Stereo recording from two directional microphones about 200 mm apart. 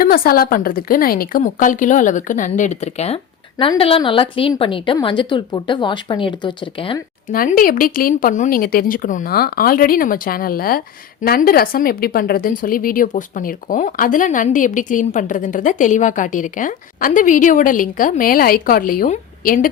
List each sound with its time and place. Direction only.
0.0 s a woman's voice: 45° left (ahead or behind); by 7.0 s 25° left (ahead or behind)
7.3 s speech: 45° left (ahead or behind)